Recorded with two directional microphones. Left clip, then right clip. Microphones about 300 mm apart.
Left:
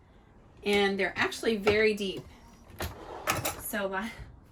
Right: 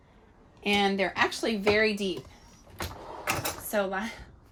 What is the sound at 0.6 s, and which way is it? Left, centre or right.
Speech, centre.